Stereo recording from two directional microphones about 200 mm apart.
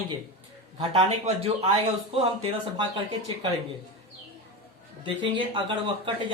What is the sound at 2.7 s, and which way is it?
Speech, 25° right (ahead or behind).